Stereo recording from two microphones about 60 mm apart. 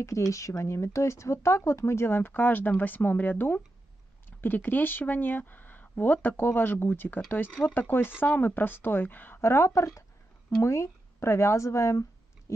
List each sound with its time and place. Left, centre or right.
0.0 s speech: left
9.4 s a woman's voice: left